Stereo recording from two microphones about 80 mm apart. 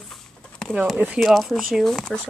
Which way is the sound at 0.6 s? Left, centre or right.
Centre.